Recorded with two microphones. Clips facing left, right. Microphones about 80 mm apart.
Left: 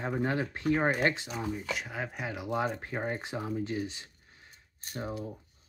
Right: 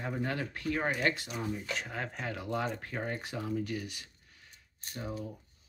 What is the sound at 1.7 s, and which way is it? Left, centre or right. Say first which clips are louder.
Speech: left 1 dB; centre.